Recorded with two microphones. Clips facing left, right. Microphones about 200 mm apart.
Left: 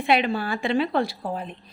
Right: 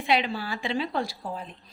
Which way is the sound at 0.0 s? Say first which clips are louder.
Left 4 dB; 55° left (ahead or behind).